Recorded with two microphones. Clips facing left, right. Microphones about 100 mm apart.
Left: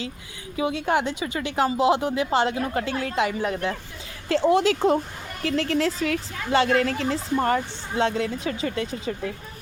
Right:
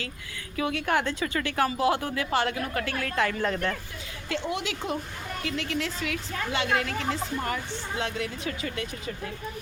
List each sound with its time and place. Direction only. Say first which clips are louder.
0.5 s speech: left 3 dB; 20° left (ahead or behind)
4.3 s speech: left 11 dB; 35° left (ahead or behind)